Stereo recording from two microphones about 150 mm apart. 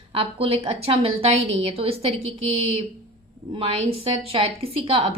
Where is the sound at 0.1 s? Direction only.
40° right (ahead or behind).